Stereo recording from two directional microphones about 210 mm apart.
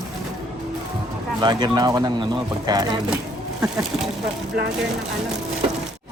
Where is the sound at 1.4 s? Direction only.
20° right (ahead or behind).